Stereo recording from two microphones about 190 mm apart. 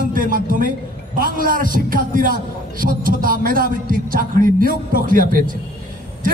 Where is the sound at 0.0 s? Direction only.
45° right (ahead or behind).